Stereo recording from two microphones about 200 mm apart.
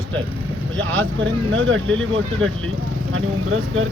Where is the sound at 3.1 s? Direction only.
90° right.